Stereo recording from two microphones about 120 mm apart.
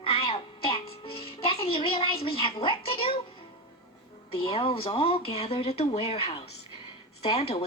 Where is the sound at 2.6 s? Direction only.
50° left (ahead or behind).